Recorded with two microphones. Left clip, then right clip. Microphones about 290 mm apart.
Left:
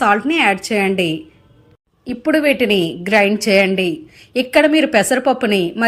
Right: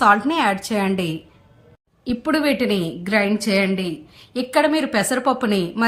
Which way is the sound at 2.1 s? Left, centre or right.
Centre.